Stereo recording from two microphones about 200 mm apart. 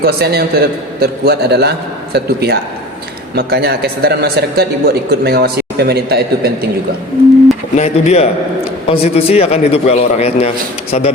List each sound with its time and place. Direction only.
0.0 s a man's voice: 50° right (ahead or behind)
7.8 s a man's voice: 30° left (ahead or behind)